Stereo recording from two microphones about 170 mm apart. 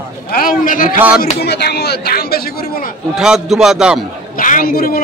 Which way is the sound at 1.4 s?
75° left (ahead or behind).